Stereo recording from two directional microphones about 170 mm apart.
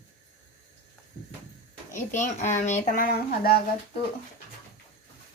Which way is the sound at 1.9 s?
45° left (ahead or behind).